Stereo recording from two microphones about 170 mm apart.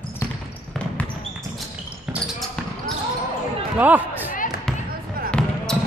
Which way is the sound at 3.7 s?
10° right (ahead or behind).